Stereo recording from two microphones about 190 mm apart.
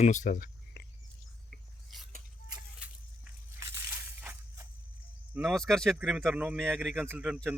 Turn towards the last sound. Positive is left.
turn(degrees=-5)  # may be behind; listen again after turning